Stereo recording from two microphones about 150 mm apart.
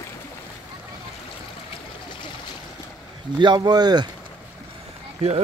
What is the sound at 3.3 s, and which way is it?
Speech, 30° right (ahead or behind).